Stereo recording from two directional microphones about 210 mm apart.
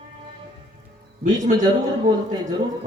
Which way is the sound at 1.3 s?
20° right (ahead or behind).